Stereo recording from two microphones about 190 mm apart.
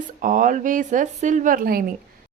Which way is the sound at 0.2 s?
45° right (ahead or behind).